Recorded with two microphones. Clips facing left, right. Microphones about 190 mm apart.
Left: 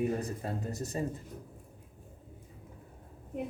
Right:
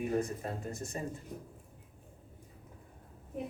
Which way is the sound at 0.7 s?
35° left (ahead or behind).